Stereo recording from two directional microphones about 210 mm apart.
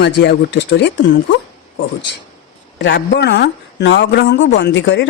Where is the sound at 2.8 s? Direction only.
55° left (ahead or behind).